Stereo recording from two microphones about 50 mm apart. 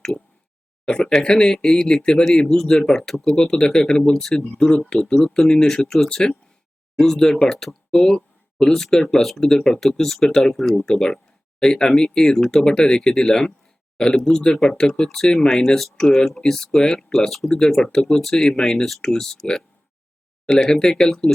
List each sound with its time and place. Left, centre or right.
0.9 s speech: centre